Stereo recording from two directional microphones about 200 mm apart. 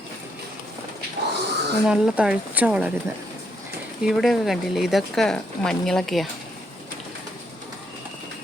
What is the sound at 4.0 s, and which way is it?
Speech, centre (ahead or behind).